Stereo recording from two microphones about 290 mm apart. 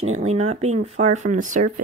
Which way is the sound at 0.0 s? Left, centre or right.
Right.